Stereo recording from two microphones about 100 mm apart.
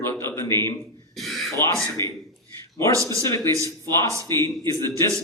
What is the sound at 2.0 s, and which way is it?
Speech, 25° left (ahead or behind).